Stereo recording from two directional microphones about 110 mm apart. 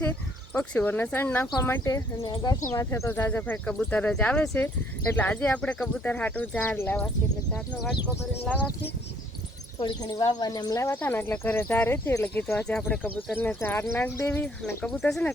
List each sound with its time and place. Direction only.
0.0 s speech: 15° left (ahead or behind)
1.8 s speech: 35° left (ahead or behind); by 7.1 s 20° left (ahead or behind)
8.4 s speech: 15° left (ahead or behind)
9.7 s speech: 50° left (ahead or behind)
10.0 s speech: 35° left (ahead or behind)
10.9 s speech: 15° left (ahead or behind)